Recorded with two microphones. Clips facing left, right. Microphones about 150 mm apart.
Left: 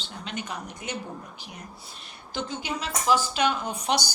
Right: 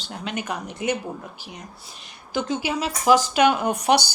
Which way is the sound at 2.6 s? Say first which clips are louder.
Right 5 dB; 90° right.